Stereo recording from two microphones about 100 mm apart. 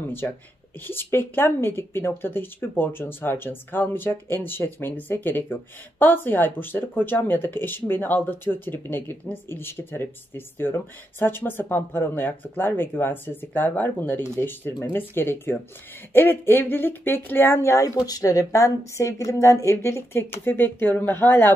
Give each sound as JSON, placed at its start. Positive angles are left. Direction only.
{"t": 0.2, "sound": "speech", "side_deg": 25}